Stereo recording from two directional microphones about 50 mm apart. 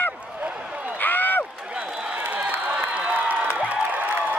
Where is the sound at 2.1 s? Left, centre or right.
Right.